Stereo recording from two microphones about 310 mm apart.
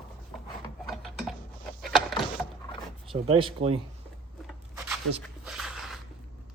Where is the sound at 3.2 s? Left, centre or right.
Centre.